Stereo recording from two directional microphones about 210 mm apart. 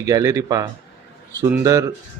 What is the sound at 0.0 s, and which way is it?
Speech, 15° right (ahead or behind).